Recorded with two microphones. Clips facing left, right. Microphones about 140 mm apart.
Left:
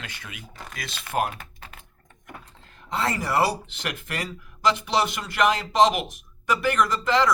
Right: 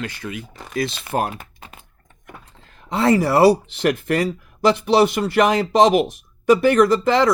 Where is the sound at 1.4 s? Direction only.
20° right (ahead or behind).